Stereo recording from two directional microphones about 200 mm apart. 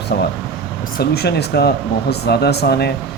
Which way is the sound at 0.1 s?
55° left (ahead or behind).